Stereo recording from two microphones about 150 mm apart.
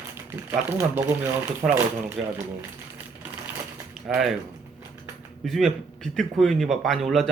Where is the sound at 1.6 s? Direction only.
5° right (ahead or behind).